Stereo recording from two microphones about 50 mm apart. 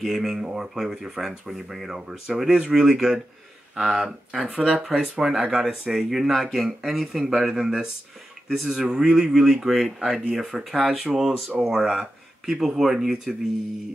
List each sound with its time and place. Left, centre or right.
0.0 s speech: centre
9.4 s speech: centre